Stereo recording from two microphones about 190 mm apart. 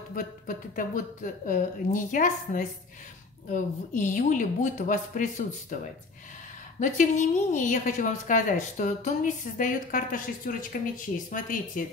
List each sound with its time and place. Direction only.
0.1 s a woman's voice: 45° left (ahead or behind)
6.8 s a woman's voice: 40° left (ahead or behind)